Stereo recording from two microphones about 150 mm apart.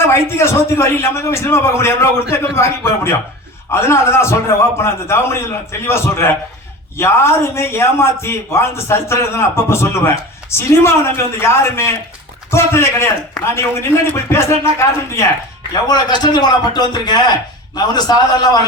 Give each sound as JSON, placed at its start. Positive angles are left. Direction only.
{"t": 0.0, "sound": "a man's voice", "side_deg": 15}